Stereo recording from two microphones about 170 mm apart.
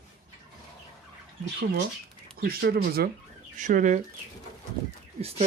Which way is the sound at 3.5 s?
45° right (ahead or behind).